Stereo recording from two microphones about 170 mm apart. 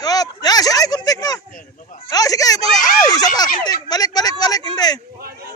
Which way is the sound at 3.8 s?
25° left (ahead or behind).